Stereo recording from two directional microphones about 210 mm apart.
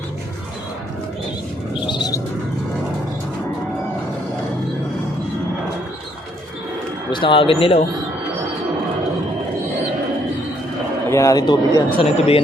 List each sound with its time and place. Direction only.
1.9 s bird: 20° left (ahead or behind)
7.1 s speech: 25° left (ahead or behind)
11.1 s speech: 15° left (ahead or behind)